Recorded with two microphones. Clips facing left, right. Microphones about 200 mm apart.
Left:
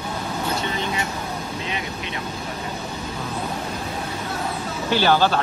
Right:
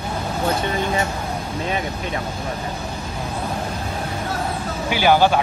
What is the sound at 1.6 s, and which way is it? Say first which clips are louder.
Speech: right 5 dB; 45° right (ahead or behind).